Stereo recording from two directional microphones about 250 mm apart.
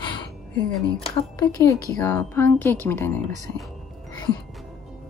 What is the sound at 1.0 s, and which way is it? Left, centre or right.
Speech, centre.